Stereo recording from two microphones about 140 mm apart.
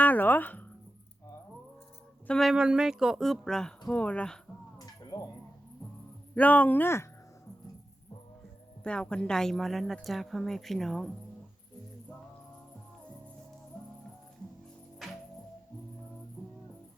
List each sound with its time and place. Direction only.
0.0 s speech: 10° left (ahead or behind)
2.2 s a woman's voice: 5° left (ahead or behind)
5.1 s speech: 30° left (ahead or behind)
6.3 s speech: 10° left (ahead or behind)
8.8 s a woman's voice: 5° left (ahead or behind)
15.0 s music: centre (ahead or behind)